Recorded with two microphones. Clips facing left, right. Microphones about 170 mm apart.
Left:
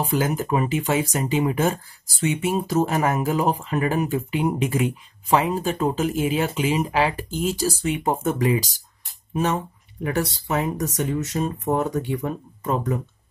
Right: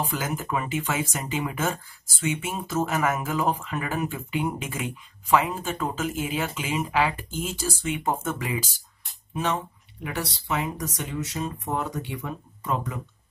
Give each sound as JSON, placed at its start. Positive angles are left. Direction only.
{"t": 0.0, "sound": "speech", "side_deg": 35}